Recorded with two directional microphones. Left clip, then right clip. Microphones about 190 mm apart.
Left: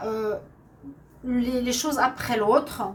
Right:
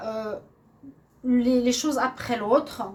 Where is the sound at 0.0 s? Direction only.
40° right (ahead or behind).